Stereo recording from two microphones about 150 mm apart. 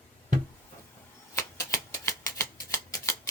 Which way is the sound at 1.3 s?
20° left (ahead or behind).